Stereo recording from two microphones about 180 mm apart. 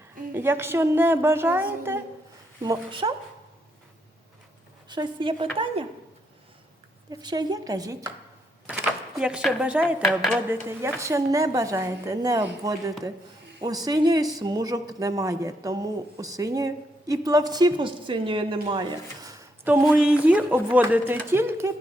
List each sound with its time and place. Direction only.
0.3 s a woman's voice: 15° right (ahead or behind)
2.6 s speech: 30° right (ahead or behind)
4.9 s speech: 25° right (ahead or behind)
7.1 s speech: 20° right (ahead or behind)
8.7 s speech: 5° right (ahead or behind)
10.5 s a woman's voice: 15° right (ahead or behind)